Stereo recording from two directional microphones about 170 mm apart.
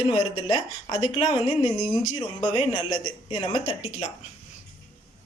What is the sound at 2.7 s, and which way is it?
Speech, 25° left (ahead or behind).